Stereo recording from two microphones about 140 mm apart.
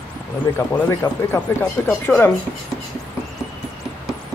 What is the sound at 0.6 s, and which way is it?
Speech, 15° left (ahead or behind).